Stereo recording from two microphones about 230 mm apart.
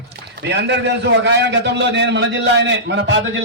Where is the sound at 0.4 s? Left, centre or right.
Right.